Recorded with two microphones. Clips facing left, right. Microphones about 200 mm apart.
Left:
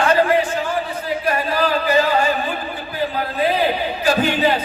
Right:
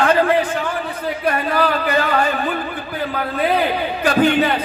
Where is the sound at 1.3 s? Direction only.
55° right (ahead or behind).